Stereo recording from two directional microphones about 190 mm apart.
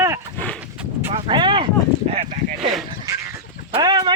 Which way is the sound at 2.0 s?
35° right (ahead or behind).